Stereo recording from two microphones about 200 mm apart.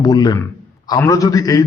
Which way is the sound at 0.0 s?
20° left (ahead or behind).